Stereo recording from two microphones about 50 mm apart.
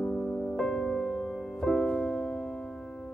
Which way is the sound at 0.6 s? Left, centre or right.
Centre.